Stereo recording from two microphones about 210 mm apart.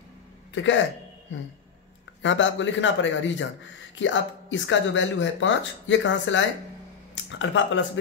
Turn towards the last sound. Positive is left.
turn(degrees=60)  # may be behind; listen again after turning